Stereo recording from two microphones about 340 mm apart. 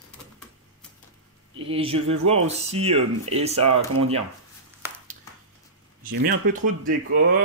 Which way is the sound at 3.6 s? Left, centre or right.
Right.